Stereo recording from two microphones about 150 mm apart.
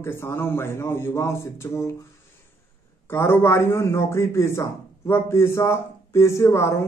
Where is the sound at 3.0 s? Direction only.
15° left (ahead or behind).